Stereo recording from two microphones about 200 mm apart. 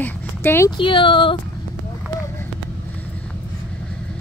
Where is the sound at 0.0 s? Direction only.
10° left (ahead or behind).